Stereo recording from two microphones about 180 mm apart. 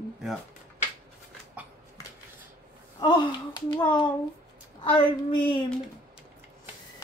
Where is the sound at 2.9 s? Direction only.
25° left (ahead or behind).